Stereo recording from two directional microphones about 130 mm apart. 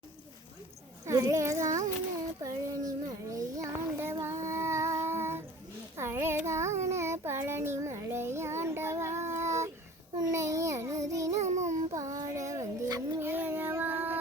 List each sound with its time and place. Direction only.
1.0 s a child's voice: 25° right (ahead or behind)
2.4 s child singing: 25° right (ahead or behind)
11.3 s a sound: 65° right (ahead or behind)
11.9 s child singing: 25° right (ahead or behind)